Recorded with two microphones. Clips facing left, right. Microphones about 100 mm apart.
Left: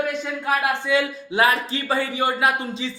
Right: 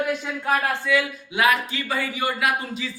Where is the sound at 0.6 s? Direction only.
25° left (ahead or behind).